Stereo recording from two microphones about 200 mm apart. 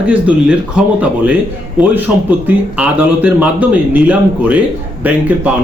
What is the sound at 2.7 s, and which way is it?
Speech, 10° right (ahead or behind).